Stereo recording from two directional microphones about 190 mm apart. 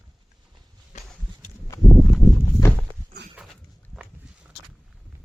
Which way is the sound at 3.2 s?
65° right (ahead or behind).